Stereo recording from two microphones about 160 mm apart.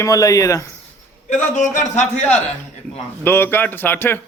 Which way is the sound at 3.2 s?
15° left (ahead or behind).